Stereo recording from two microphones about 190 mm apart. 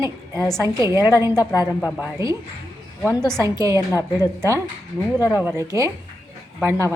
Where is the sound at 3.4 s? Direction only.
15° right (ahead or behind).